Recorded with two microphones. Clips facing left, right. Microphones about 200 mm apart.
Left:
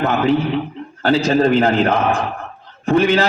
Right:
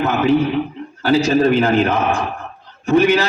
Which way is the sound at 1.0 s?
55° left (ahead or behind).